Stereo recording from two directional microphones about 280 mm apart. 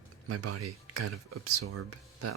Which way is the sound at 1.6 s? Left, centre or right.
Right.